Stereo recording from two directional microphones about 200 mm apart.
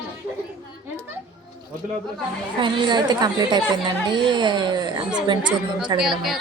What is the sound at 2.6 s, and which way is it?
A woman's voice, 25° right (ahead or behind).